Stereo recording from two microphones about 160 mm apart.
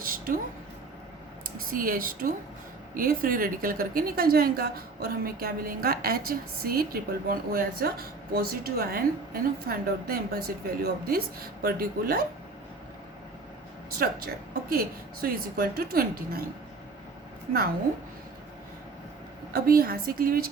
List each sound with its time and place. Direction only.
0.0 s a sound: 60° right (ahead or behind)
1.5 s speech: 65° right (ahead or behind)
14.7 s speech: 70° right (ahead or behind)
19.5 s speech: 70° right (ahead or behind)